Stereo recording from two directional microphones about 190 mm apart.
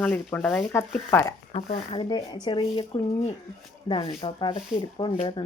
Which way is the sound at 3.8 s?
25° left (ahead or behind).